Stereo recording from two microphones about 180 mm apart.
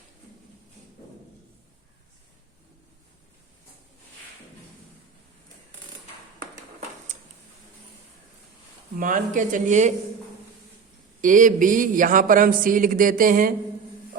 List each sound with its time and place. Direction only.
9.0 s speech: 45° right (ahead or behind)
11.2 s speech: 45° right (ahead or behind)